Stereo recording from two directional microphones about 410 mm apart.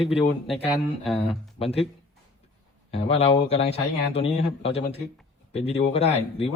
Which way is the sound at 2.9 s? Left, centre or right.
Centre.